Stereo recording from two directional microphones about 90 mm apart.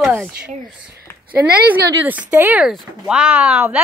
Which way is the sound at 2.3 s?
20° right (ahead or behind).